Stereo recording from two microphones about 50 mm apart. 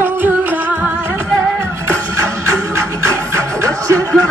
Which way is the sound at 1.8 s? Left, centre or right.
Right.